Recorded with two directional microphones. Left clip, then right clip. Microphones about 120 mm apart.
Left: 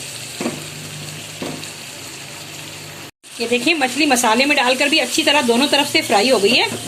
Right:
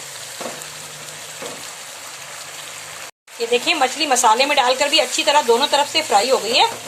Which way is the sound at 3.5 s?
60° right (ahead or behind).